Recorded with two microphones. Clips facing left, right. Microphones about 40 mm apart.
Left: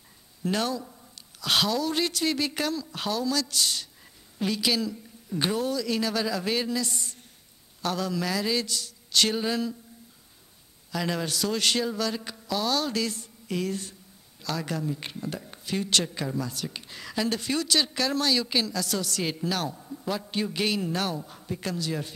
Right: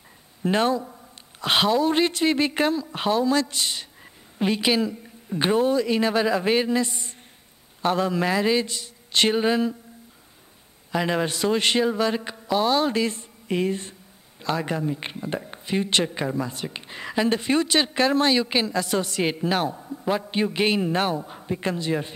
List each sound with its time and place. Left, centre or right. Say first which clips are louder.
0.4 s speech: right 6 dB; right
10.9 s speech: right 6 dB; right